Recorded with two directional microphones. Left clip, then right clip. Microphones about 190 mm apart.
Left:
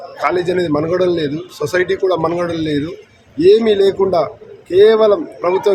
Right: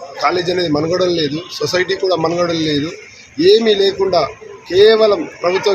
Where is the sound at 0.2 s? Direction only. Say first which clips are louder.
Even; 30° left (ahead or behind).